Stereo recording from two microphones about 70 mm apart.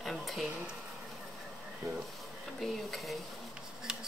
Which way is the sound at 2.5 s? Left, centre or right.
Centre.